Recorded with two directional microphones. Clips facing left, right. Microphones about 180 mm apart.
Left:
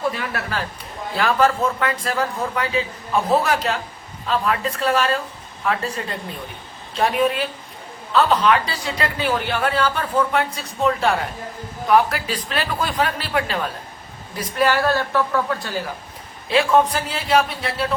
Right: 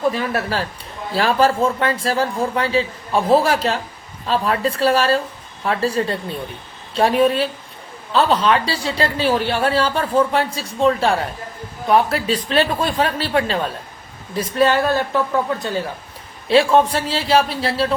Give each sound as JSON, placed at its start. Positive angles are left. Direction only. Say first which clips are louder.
{"t": 1.1, "sound": "a man's voice", "louder": "right 2 dB", "side_deg": -35}